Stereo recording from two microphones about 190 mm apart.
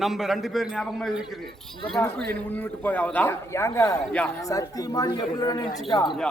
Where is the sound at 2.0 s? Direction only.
15° left (ahead or behind).